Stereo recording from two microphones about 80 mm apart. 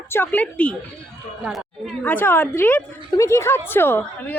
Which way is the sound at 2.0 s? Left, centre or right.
Left.